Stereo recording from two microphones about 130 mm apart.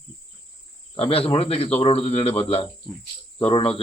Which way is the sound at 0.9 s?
45° left (ahead or behind).